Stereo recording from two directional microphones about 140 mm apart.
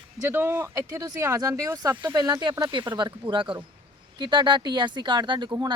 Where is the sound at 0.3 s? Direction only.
15° right (ahead or behind).